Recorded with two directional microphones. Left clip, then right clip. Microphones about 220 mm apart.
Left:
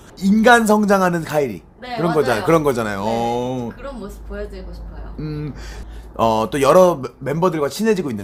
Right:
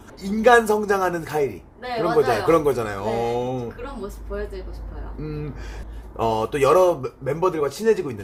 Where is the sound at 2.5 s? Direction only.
40° left (ahead or behind).